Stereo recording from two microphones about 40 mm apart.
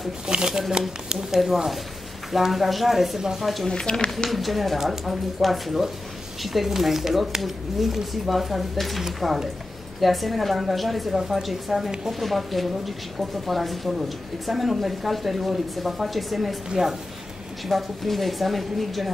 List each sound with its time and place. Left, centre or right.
0.3 s speech: right
1.3 s speech: centre
3.6 s speech: centre
4.3 s speech: centre